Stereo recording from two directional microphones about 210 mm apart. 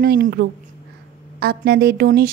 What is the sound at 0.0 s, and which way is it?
Speech, 45° right (ahead or behind).